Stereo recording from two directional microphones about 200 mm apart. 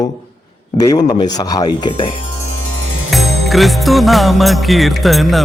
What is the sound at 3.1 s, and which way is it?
Music, centre (ahead or behind).